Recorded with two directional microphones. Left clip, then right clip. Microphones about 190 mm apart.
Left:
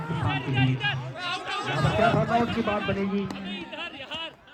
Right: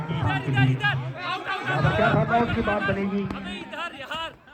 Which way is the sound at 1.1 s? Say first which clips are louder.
Right 2 dB; 60° left (ahead or behind).